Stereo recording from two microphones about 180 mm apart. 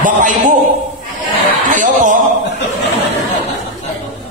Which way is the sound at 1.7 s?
45° right (ahead or behind).